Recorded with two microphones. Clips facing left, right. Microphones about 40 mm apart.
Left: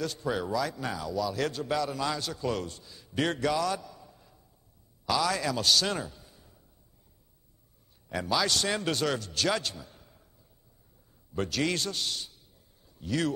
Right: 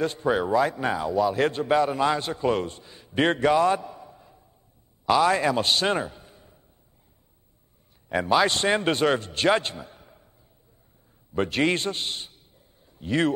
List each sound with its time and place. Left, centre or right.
0.0 s a man's voice: right
8.1 s a man's voice: right
11.3 s a man's voice: right
12.8 s a sound: right